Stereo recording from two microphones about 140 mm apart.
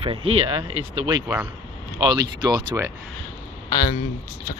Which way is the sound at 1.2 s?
15° right (ahead or behind).